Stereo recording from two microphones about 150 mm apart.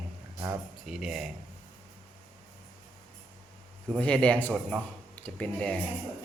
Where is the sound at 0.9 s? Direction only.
5° right (ahead or behind).